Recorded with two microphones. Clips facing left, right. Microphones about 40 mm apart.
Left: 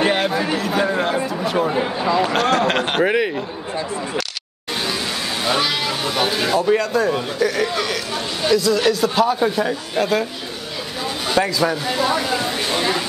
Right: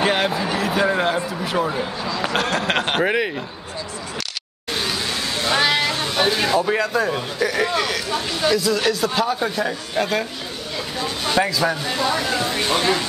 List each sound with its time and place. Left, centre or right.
0.0 s speech: centre
0.6 s a sound: centre
1.7 s speech: left
2.2 s speech: centre
5.6 s speech: centre